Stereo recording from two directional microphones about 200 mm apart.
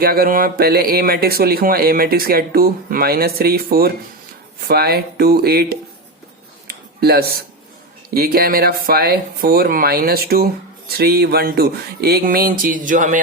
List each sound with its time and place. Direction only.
0.0 s speech: 45° right (ahead or behind)
6.7 s a sound: 50° right (ahead or behind)
8.1 s speech: 50° right (ahead or behind)